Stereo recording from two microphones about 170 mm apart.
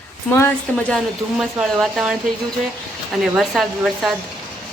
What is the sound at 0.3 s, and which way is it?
Speech, 15° left (ahead or behind).